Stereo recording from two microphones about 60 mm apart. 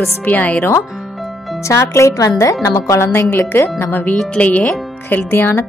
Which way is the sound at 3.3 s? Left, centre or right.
Left.